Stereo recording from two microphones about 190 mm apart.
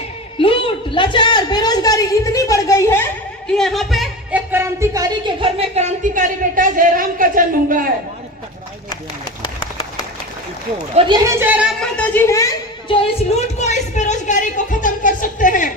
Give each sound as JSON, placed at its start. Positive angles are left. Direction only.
{"t": 0.3, "sound": "a man's voice", "side_deg": 30}
{"t": 3.6, "sound": "speech", "side_deg": 0}
{"t": 4.5, "sound": "speech", "side_deg": -15}
{"t": 11.0, "sound": "speech", "side_deg": -35}
{"t": 11.3, "sound": "a woman's voice", "side_deg": -10}
{"t": 11.8, "sound": "speech", "side_deg": 5}
{"t": 12.9, "sound": "speech", "side_deg": 30}